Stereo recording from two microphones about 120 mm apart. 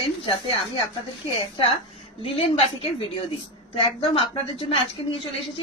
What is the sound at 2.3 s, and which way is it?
A woman's voice, 50° left (ahead or behind).